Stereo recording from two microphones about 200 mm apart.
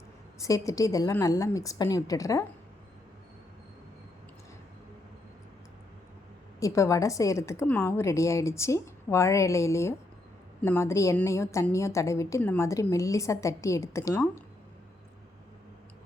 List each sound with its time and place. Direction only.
0.3 s a woman's voice: 15° left (ahead or behind)
6.6 s a woman's voice: 15° left (ahead or behind)